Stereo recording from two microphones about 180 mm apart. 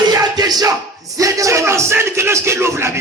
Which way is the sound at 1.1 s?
20° right (ahead or behind).